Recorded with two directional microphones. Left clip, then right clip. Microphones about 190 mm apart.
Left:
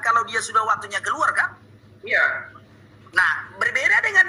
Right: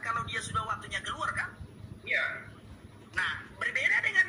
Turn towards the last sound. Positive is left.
turn(degrees=40)  # may be behind; listen again after turning